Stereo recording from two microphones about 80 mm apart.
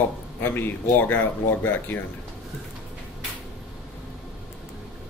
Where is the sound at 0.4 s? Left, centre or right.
Left.